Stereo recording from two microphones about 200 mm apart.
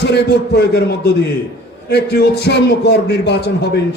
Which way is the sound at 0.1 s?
55° left (ahead or behind).